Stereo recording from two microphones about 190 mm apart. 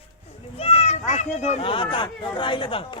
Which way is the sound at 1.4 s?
35° left (ahead or behind).